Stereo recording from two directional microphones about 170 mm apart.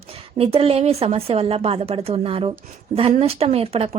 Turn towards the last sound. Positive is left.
turn(degrees=-35)  # may be behind; listen again after turning